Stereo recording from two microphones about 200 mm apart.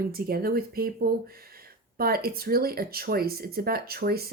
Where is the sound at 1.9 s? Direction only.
50° right (ahead or behind).